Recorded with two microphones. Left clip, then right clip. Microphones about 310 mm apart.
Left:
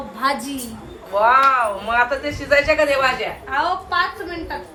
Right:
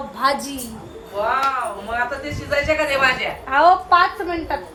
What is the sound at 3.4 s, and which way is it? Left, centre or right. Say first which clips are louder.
Speech: right 8 dB; right.